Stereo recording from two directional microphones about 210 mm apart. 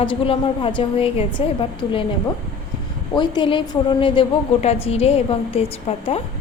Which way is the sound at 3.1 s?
20° left (ahead or behind).